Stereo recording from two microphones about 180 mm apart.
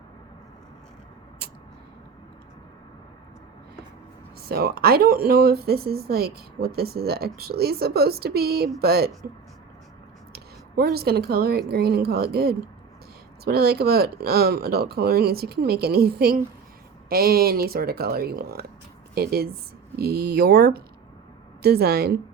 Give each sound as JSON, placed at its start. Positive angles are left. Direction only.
{"t": 4.4, "sound": "speech", "side_deg": -60}
{"t": 10.3, "sound": "speech", "side_deg": -60}